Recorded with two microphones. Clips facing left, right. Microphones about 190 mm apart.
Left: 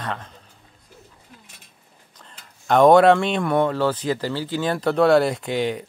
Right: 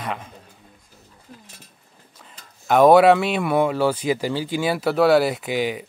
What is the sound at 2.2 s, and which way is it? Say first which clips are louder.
Speech: even; 5° right (ahead or behind).